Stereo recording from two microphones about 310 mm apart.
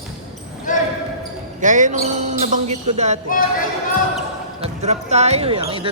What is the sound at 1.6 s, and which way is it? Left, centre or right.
Speech, right.